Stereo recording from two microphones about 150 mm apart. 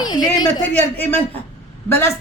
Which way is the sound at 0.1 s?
25° left (ahead or behind).